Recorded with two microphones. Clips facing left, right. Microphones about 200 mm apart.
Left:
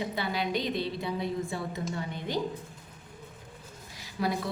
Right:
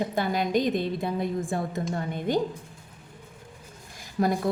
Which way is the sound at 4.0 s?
50° right (ahead or behind).